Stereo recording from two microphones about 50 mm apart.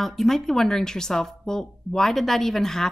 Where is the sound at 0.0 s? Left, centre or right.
Centre.